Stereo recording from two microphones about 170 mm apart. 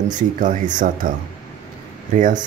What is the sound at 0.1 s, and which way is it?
Speech, 50° right (ahead or behind).